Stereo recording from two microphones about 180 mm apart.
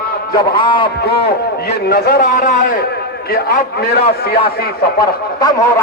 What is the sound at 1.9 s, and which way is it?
Speech, 60° left (ahead or behind).